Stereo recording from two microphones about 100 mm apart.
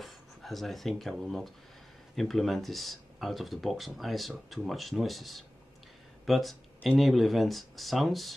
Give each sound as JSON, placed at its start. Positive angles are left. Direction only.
{"t": 0.0, "sound": "speech", "side_deg": 0}